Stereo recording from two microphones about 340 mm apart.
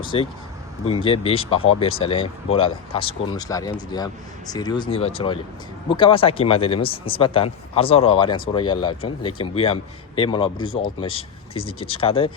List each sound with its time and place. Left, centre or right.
0.0 s speech: centre